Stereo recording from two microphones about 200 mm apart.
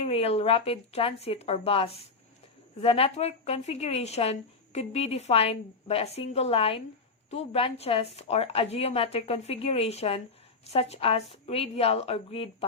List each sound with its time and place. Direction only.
0.0 s a woman's voice: 30° left (ahead or behind)